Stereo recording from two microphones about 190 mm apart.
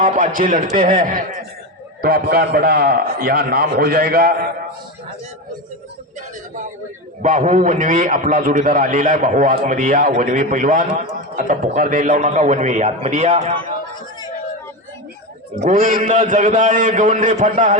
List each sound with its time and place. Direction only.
0.0 s a man's voice: 45° right (ahead or behind)
7.2 s a man's voice: 40° right (ahead or behind)
15.6 s a man's voice: 35° right (ahead or behind)